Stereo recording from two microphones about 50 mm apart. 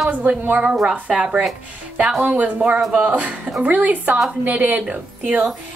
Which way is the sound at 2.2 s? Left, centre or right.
Right.